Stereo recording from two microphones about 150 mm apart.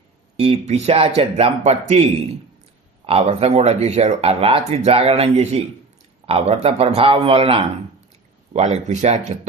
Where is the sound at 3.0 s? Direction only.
40° right (ahead or behind).